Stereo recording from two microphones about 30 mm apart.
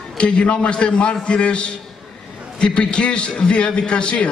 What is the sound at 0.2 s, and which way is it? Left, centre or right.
A man's voice, left.